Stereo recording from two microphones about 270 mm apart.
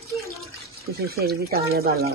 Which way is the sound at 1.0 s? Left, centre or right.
Right.